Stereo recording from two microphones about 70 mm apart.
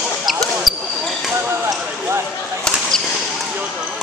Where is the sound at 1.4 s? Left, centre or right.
Right.